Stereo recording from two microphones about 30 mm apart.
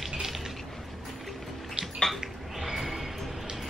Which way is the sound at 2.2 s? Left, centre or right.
Centre.